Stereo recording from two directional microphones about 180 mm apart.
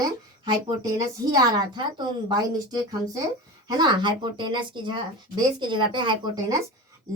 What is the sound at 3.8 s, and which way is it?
Speech, 25° right (ahead or behind).